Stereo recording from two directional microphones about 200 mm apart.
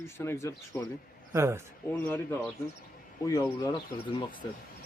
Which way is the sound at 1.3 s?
15° right (ahead or behind).